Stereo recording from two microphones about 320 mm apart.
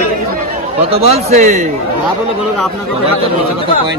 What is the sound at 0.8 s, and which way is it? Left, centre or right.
Speech, centre.